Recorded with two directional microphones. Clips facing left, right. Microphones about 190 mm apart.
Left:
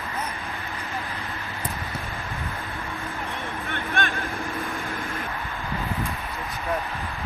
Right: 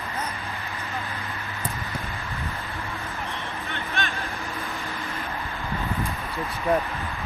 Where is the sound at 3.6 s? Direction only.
50° left (ahead or behind).